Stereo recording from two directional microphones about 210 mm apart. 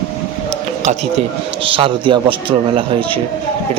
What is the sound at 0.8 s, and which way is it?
A man's voice, 35° right (ahead or behind).